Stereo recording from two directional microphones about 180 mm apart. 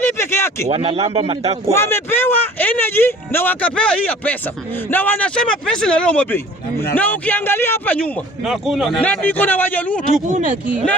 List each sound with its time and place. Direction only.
0.0 s a sound: 15° left (ahead or behind)
0.7 s a man's voice: 30° right (ahead or behind)
1.7 s speech: 15° left (ahead or behind)
9.0 s speech: 10° left (ahead or behind)